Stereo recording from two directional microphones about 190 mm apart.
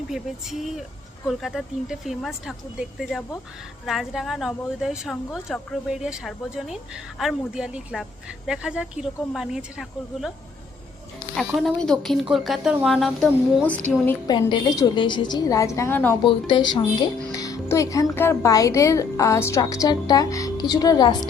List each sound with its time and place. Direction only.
0.1 s a woman's voice: centre (ahead or behind)
11.3 s a woman's voice: 5° left (ahead or behind)
14.3 s a woman's voice: 25° left (ahead or behind)
16.2 s a woman's voice: 25° left (ahead or behind)